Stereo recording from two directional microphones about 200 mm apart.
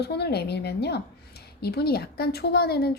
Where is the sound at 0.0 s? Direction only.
55° left (ahead or behind).